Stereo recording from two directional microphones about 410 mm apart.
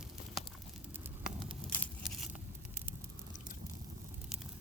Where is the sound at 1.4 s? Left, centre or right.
Centre.